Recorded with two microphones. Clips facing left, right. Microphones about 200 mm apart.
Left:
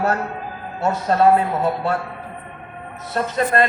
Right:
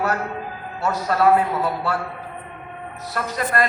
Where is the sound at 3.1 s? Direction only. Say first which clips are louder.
Left 4 dB; 25° left (ahead or behind).